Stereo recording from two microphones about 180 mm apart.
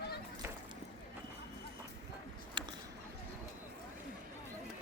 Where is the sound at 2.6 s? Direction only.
25° right (ahead or behind).